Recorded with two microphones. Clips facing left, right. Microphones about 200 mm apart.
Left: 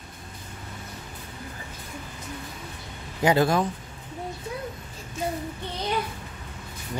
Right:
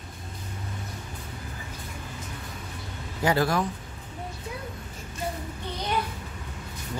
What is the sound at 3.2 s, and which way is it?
Speech, 20° left (ahead or behind).